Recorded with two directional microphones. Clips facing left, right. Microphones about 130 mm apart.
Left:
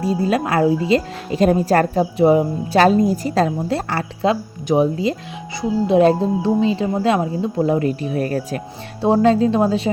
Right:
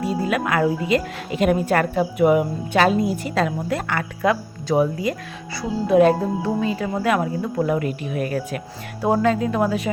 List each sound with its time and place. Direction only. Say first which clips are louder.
0.0 s a woman's voice: left 3 dB; 30° left (ahead or behind)